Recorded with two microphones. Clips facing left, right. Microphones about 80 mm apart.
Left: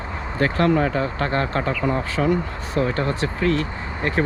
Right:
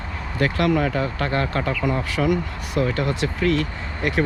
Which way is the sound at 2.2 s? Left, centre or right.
Left.